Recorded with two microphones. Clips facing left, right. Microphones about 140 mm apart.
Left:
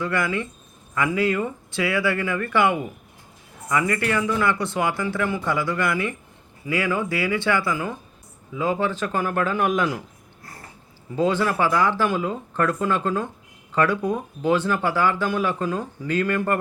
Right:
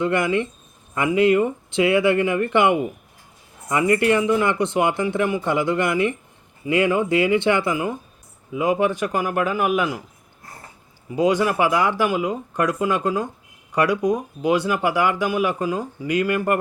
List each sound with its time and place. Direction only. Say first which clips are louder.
0.0 s speech: right 4 dB; 20° right (ahead or behind)
11.1 s speech: right 3 dB; 15° right (ahead or behind)